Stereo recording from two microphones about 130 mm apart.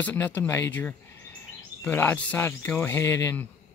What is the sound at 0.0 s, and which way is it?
Speech, 10° left (ahead or behind).